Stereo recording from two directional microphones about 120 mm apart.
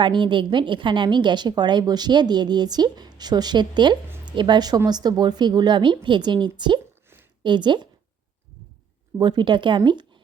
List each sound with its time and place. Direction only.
0.0 s a woman's voice: 40° right (ahead or behind)
9.1 s a woman's voice: 40° right (ahead or behind)